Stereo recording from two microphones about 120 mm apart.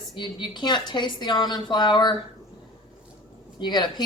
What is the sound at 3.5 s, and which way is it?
Speech, 40° left (ahead or behind).